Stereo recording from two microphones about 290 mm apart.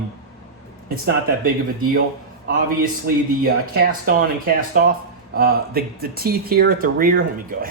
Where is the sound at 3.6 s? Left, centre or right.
Right.